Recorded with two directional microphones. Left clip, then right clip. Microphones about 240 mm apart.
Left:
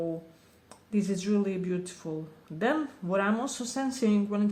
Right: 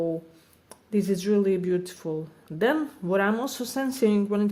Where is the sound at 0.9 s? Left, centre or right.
Right.